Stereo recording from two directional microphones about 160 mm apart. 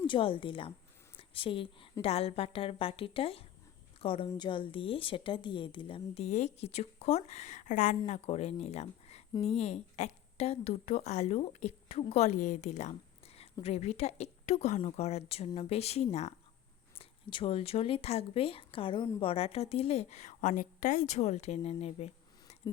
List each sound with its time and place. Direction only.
0.0 s speech: 35° left (ahead or behind)